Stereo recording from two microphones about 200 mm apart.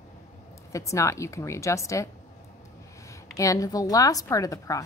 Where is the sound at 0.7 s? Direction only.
15° left (ahead or behind).